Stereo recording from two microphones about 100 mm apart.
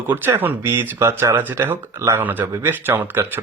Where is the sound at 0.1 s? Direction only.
20° right (ahead or behind).